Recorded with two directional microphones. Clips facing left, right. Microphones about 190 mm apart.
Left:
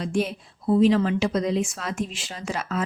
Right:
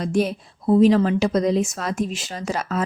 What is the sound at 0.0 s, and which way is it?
Speech, 40° right (ahead or behind).